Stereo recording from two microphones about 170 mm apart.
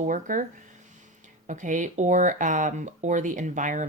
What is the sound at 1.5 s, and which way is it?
Speech, 45° right (ahead or behind).